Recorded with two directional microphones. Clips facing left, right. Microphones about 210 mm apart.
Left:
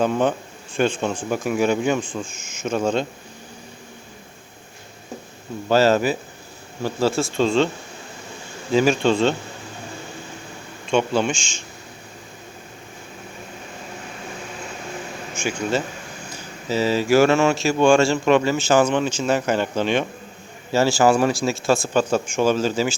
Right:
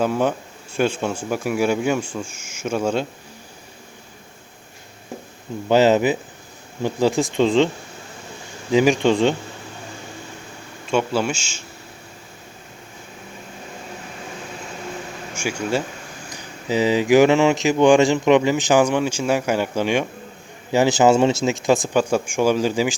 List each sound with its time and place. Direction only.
0.0 s speech: 10° right (ahead or behind)
5.6 s speech: 20° right (ahead or behind)
8.7 s speech: 15° right (ahead or behind)
10.9 s speech: 5° right (ahead or behind)
15.3 s speech: 10° right (ahead or behind)